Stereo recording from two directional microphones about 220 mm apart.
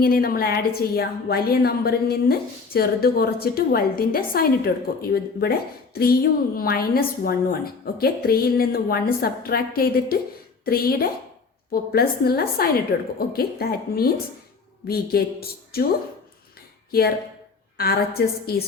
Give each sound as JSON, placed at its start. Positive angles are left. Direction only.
{"t": 0.0, "sound": "a woman's voice", "side_deg": 40}
{"t": 17.7, "sound": "a woman's voice", "side_deg": 45}